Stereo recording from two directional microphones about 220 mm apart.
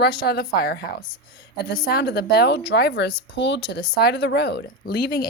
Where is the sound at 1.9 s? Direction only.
45° left (ahead or behind).